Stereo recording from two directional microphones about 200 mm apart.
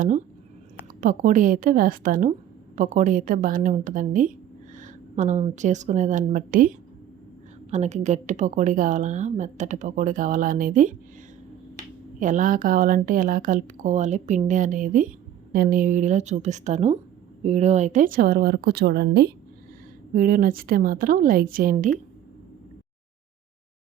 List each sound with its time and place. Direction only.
1.0 s a woman's voice: 40° right (ahead or behind)
12.2 s a woman's voice: 40° right (ahead or behind)
20.1 s speech: 45° right (ahead or behind)